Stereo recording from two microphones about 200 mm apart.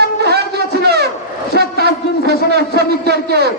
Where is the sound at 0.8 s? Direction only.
55° right (ahead or behind).